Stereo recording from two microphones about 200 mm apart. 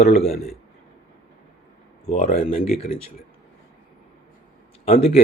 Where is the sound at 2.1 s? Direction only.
35° left (ahead or behind).